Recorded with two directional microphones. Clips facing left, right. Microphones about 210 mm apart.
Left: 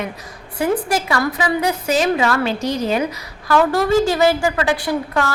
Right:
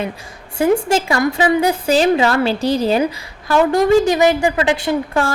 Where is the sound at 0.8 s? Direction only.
25° right (ahead or behind).